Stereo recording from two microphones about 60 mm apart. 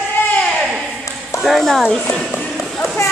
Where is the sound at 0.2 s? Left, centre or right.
Left.